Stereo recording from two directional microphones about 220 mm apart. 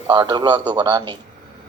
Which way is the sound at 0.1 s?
20° right (ahead or behind).